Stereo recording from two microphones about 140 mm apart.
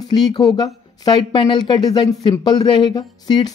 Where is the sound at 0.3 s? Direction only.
30° left (ahead or behind).